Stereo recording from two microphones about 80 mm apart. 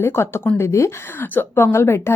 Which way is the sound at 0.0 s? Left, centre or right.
Left.